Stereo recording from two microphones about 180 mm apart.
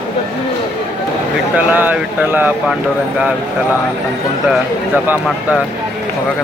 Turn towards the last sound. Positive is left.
turn(degrees=-10)  # may be behind; listen again after turning